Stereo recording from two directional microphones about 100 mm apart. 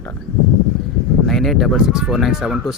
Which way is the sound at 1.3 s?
Centre (ahead or behind).